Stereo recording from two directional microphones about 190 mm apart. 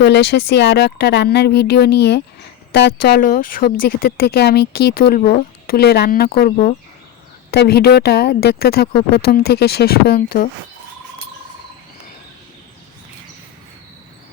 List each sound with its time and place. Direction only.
0.0 s a woman's voice: 60° left (ahead or behind)
3.2 s a woman's voice: 45° left (ahead or behind)